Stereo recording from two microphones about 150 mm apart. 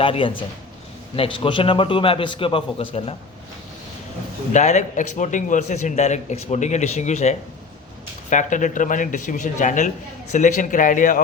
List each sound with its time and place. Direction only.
0.0 s a man's voice: 35° left (ahead or behind)
4.5 s a man's voice: 50° left (ahead or behind)